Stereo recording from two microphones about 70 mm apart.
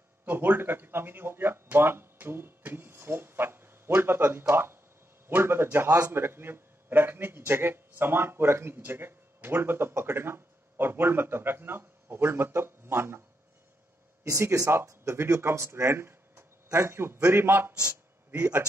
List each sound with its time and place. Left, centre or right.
0.2 s a man's voice: right
14.2 s a man's voice: right